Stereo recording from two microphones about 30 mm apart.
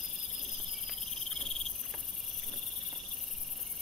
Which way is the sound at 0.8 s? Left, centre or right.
Centre.